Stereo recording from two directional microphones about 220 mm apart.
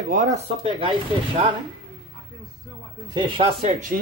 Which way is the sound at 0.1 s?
35° right (ahead or behind).